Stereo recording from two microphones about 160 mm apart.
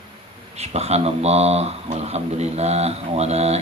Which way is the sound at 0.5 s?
40° right (ahead or behind).